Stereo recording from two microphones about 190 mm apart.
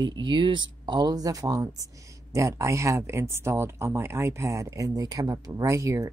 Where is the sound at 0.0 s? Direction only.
25° right (ahead or behind).